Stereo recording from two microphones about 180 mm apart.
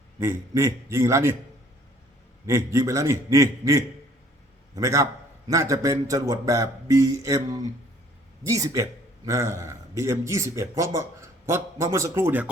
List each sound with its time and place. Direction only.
0.2 s a man's voice: 15° right (ahead or behind)
2.5 s a man's voice: 15° right (ahead or behind)